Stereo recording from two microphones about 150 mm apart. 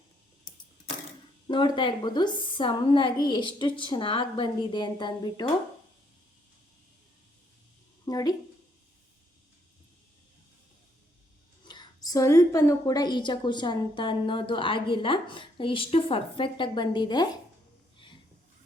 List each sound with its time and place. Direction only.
1.5 s a woman's voice: 30° left (ahead or behind)
8.0 s speech: 25° left (ahead or behind)
11.6 s a woman's voice: 30° left (ahead or behind)